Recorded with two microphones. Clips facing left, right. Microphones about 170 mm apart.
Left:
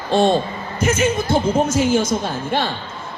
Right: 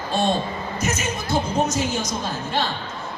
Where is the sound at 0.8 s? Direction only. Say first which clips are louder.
Left 9 dB; 55° left (ahead or behind).